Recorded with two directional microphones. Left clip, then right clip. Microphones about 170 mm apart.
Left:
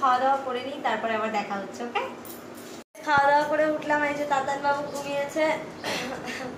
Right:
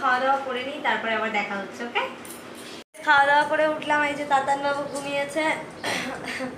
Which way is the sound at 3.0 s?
5° left (ahead or behind).